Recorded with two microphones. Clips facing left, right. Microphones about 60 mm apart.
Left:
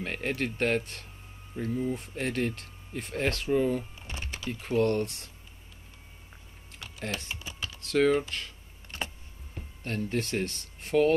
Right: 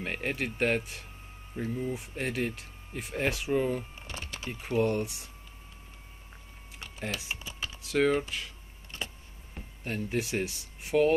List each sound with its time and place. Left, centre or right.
0.0 s speech: centre
4.1 s typing: left
4.5 s speech: centre
7.0 s speech: centre
9.8 s speech: centre